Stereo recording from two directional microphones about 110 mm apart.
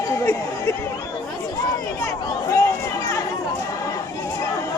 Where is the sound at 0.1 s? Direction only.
25° left (ahead or behind).